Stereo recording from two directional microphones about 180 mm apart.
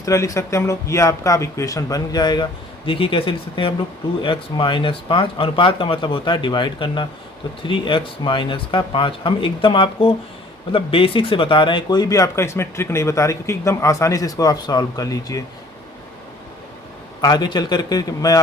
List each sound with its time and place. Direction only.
0.0 s speech: 20° left (ahead or behind)
17.2 s speech: 25° left (ahead or behind)